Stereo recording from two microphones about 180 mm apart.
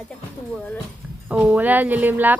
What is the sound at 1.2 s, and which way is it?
Speech, 5° right (ahead or behind).